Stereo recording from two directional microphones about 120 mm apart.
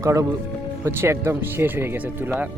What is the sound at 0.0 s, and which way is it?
Speech, 25° right (ahead or behind).